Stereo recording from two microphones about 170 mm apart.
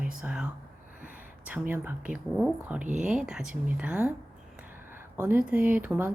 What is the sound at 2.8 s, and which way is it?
Speech, 45° right (ahead or behind).